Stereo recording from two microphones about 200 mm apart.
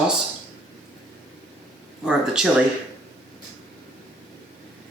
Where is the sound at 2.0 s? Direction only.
5° right (ahead or behind).